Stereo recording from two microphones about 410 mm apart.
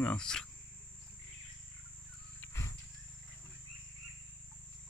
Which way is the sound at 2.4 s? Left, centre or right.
Centre.